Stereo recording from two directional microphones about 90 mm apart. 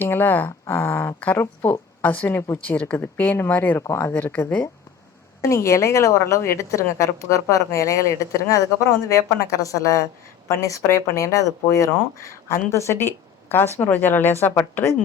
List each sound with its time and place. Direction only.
0.0 s speech: 20° left (ahead or behind)
5.4 s a woman's voice: 35° left (ahead or behind)